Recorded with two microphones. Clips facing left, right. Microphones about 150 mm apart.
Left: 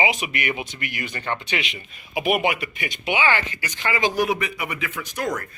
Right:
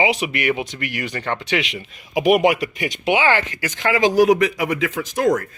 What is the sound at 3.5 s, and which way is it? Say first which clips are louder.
Speech: right 6 dB; 90° right.